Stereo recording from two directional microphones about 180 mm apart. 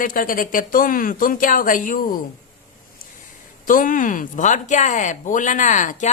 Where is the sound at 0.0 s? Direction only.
50° left (ahead or behind).